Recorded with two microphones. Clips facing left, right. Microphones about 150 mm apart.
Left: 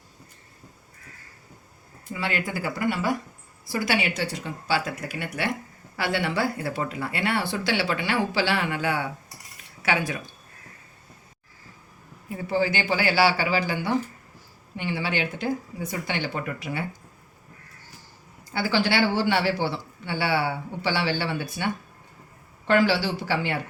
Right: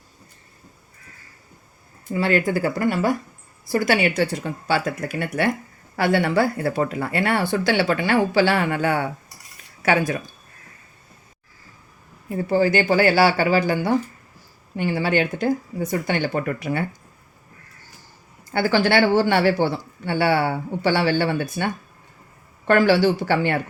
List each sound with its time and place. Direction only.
2.1 s speech: 45° right (ahead or behind)
12.3 s speech: 45° right (ahead or behind)
18.5 s speech: 55° right (ahead or behind)